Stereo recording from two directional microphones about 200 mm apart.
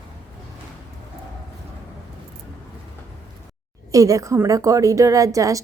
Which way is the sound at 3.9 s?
15° right (ahead or behind).